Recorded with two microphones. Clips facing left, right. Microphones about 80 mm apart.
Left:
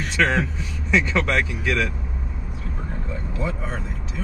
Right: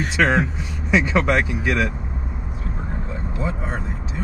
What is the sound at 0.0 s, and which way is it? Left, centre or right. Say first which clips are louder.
Speech: right 3 dB; centre.